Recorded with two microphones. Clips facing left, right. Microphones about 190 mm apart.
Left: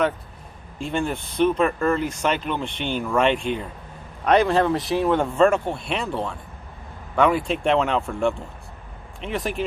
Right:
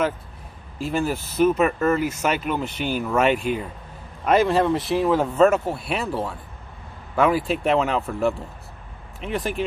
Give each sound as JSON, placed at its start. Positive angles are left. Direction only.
{"t": 0.8, "sound": "speech", "side_deg": -5}